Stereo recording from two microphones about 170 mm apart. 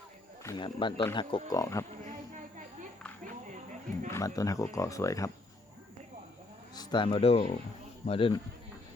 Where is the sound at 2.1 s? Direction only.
45° right (ahead or behind).